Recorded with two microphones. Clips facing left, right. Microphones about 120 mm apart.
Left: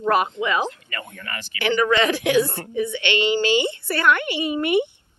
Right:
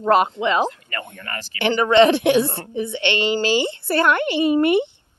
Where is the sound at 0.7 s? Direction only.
45° right (ahead or behind).